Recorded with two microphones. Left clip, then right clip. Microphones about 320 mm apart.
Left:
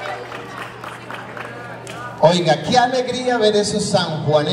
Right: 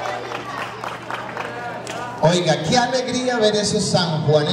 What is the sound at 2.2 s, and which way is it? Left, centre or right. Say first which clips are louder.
A man's voice: left 4 dB; left.